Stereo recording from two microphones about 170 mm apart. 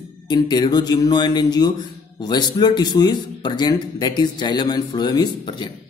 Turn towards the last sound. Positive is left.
turn(degrees=25)  # may be behind; listen again after turning